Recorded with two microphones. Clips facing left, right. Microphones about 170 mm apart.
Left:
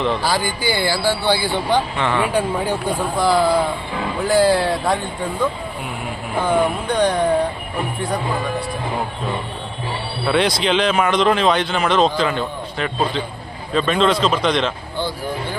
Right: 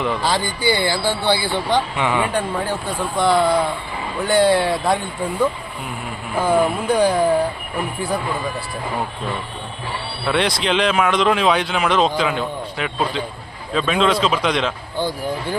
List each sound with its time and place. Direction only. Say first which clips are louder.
0.2 s music: even; 25° right (ahead or behind)
1.2 s speech: left 1 dB; 10° left (ahead or behind)
2.0 s speech: even; 10° right (ahead or behind)
2.2 s speech: left 2 dB; 10° left (ahead or behind)
10.2 s speech: left 2 dB; centre (ahead or behind)